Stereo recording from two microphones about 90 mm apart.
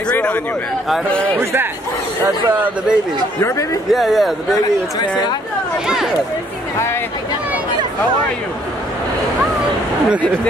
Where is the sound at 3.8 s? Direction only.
Centre (ahead or behind).